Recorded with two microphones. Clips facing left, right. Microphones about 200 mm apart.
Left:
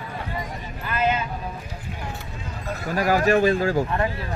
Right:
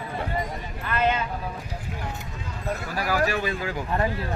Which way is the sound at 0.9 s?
5° left (ahead or behind).